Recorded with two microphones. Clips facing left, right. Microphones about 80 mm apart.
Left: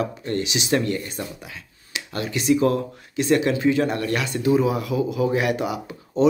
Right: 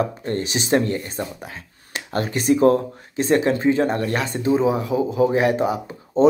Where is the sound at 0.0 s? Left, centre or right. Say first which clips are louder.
Right 2 dB; right.